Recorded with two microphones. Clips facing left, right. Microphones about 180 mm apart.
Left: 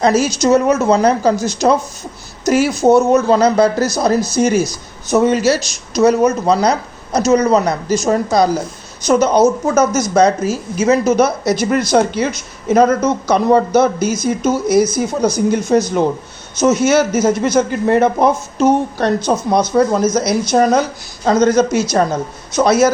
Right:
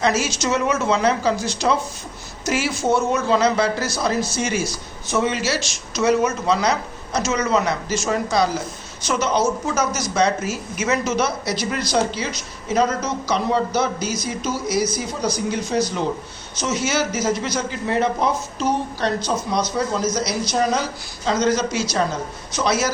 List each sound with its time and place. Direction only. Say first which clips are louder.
0.0 s speech: left 7 dB; 40° left (ahead or behind)